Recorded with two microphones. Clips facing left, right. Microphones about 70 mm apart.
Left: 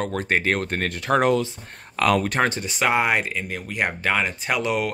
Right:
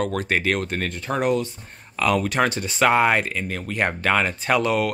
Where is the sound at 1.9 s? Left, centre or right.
Left.